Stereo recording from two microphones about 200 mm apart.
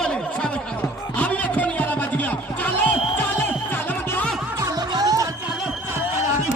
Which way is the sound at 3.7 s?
10° left (ahead or behind).